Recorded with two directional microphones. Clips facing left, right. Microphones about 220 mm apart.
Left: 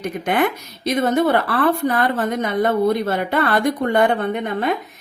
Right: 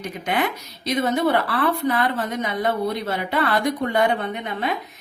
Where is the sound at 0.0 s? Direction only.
50° left (ahead or behind).